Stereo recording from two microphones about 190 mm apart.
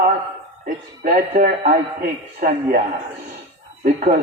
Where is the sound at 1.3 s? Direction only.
45° right (ahead or behind).